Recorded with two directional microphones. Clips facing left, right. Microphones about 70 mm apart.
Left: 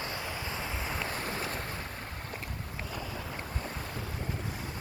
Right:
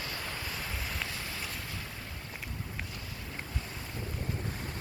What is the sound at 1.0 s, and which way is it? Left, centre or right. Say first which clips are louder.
Boat: left 5 dB; left.